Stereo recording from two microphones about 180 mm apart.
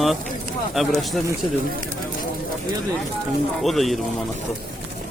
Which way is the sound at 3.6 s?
Centre (ahead or behind).